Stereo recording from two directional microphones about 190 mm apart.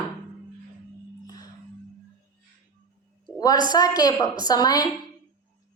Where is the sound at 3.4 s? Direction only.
20° left (ahead or behind).